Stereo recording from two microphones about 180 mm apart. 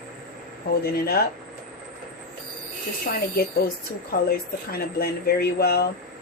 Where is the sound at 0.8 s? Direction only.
55° left (ahead or behind).